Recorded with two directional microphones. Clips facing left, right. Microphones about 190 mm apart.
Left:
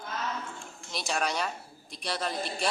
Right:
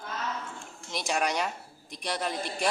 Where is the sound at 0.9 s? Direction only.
15° right (ahead or behind).